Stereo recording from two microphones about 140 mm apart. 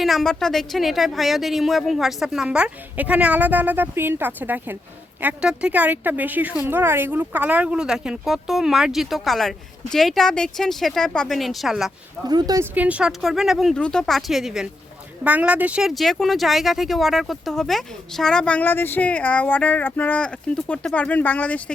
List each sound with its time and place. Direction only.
0.0 s speech: centre (ahead or behind)
12.3 s speech: 30° right (ahead or behind)
12.7 s speech: 10° right (ahead or behind); by 21.6 s 10° left (ahead or behind)